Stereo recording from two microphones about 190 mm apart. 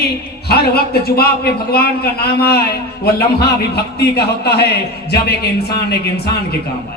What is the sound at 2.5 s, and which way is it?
A man's voice, 55° left (ahead or behind).